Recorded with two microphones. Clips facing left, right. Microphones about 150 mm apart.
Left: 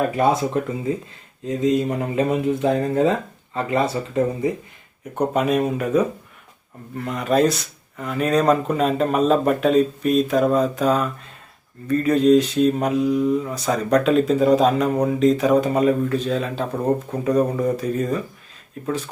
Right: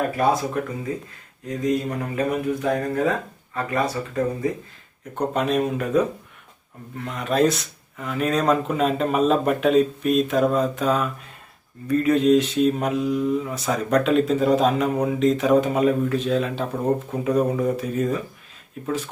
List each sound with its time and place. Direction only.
0.2 s speech: 25° left (ahead or behind)
5.1 s speech: 5° left (ahead or behind)